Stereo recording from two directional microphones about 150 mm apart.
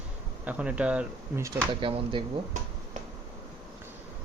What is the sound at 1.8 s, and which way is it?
Speech, 35° right (ahead or behind).